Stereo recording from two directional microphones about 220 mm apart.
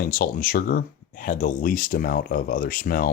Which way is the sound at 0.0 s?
40° left (ahead or behind).